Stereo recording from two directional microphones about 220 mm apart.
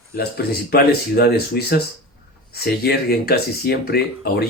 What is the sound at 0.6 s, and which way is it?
Speech, 45° left (ahead or behind).